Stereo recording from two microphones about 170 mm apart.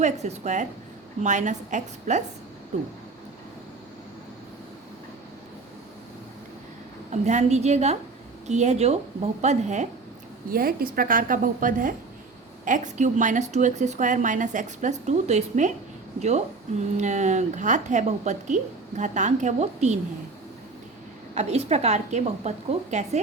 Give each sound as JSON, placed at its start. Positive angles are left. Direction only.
{"t": 0.0, "sound": "a woman's voice", "side_deg": -45}
{"t": 7.1, "sound": "a woman's voice", "side_deg": -45}
{"t": 10.5, "sound": "a woman's voice", "side_deg": -60}
{"t": 17.0, "sound": "a woman's voice", "side_deg": -45}
{"t": 21.3, "sound": "a woman's voice", "side_deg": -40}